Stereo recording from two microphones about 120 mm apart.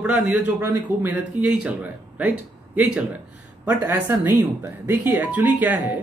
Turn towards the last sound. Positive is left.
turn(degrees=-15)  # may be behind; listen again after turning